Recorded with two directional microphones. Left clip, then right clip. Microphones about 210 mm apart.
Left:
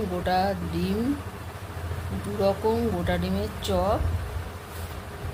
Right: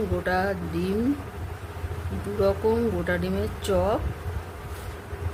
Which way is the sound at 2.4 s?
25° right (ahead or behind).